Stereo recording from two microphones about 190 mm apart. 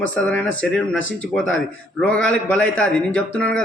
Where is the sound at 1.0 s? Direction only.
90° left.